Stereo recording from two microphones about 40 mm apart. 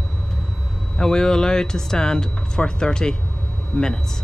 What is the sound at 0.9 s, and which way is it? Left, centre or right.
Speech, centre.